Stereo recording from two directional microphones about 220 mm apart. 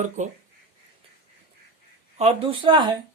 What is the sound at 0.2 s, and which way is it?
Speech, 35° right (ahead or behind).